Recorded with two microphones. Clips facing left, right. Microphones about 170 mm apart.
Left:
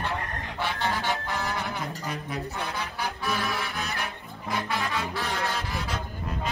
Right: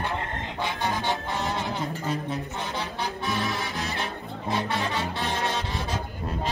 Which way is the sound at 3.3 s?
25° right (ahead or behind).